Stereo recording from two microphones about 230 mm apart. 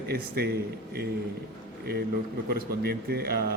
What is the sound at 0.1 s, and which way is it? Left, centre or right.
Speech, right.